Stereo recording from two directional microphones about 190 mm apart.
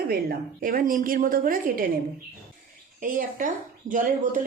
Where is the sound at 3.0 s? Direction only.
45° right (ahead or behind).